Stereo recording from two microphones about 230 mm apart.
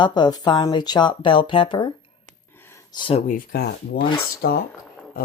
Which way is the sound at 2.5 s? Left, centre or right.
Centre.